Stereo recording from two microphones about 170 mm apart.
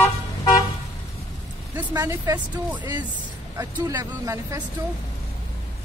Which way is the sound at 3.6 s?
20° right (ahead or behind).